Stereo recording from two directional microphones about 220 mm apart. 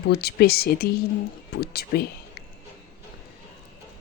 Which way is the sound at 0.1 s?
45° left (ahead or behind).